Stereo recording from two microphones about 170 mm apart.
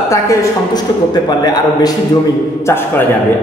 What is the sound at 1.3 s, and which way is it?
Speech, 25° left (ahead or behind).